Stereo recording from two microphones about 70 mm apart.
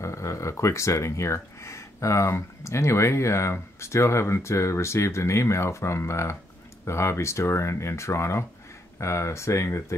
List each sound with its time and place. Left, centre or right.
0.0 s speech: left